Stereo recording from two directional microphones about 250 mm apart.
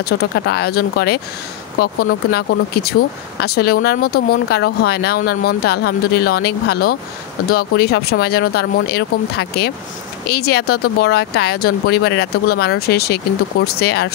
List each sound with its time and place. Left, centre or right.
0.0 s speech: left